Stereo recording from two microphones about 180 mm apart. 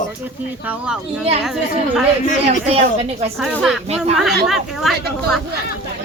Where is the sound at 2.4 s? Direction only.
35° right (ahead or behind).